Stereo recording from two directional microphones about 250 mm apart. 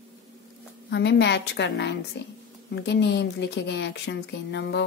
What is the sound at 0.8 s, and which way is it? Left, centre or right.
Speech, left.